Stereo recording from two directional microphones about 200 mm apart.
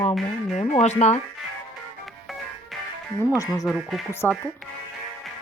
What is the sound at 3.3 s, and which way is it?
Speech, 15° left (ahead or behind).